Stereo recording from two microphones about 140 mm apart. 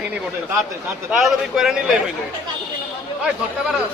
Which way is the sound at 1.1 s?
5° right (ahead or behind).